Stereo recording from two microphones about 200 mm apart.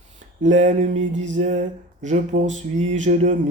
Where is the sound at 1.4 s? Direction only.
35° right (ahead or behind).